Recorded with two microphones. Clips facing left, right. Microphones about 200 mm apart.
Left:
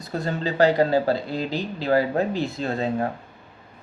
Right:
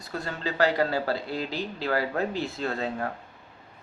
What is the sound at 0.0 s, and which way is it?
Speech, 20° left (ahead or behind).